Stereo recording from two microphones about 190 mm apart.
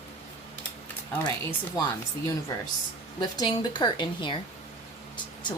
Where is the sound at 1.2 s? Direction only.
20° left (ahead or behind).